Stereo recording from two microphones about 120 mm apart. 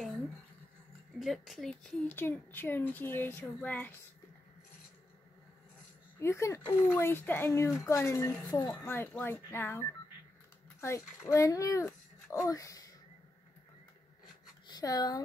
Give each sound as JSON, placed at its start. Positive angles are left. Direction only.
{"t": 1.2, "sound": "a woman's voice", "side_deg": 0}
{"t": 2.1, "sound": "speech", "side_deg": 15}
{"t": 6.1, "sound": "a child's voice", "side_deg": 20}
{"t": 14.7, "sound": "speech", "side_deg": 30}